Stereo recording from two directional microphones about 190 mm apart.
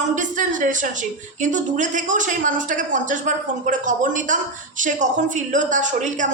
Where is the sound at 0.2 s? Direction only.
40° right (ahead or behind).